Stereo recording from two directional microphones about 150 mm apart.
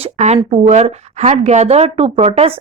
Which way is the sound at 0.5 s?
45° right (ahead or behind).